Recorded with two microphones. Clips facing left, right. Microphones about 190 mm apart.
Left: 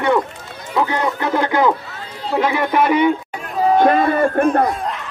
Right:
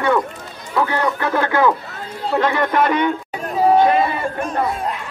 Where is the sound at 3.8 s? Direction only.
50° left (ahead or behind).